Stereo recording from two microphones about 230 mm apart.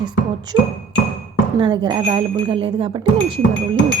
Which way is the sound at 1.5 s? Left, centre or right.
Centre.